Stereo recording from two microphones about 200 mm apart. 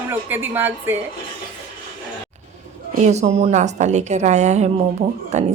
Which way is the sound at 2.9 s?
35° right (ahead or behind).